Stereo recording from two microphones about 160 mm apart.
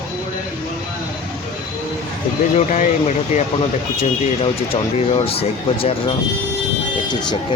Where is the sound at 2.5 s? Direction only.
50° left (ahead or behind).